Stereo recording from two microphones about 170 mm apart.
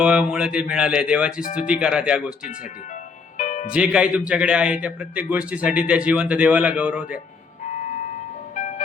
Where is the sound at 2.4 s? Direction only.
55° left (ahead or behind).